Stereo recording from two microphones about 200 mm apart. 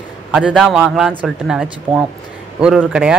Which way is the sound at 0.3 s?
5° right (ahead or behind).